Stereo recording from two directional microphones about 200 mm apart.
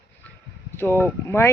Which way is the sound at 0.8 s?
10° left (ahead or behind).